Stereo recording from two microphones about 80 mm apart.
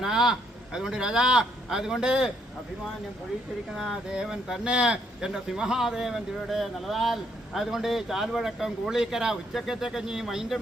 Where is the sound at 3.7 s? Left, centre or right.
Centre.